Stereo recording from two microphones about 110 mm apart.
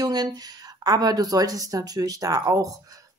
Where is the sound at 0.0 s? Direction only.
40° right (ahead or behind).